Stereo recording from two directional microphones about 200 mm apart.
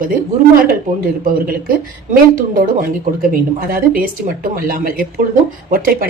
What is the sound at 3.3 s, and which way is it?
Speech, 45° right (ahead or behind).